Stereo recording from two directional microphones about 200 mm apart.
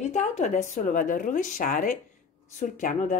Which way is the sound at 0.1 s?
35° left (ahead or behind).